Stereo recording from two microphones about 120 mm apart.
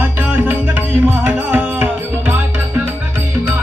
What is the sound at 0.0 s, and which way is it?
Music, 15° right (ahead or behind).